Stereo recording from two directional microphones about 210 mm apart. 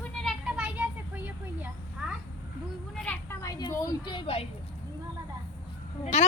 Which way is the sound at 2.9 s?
5° left (ahead or behind).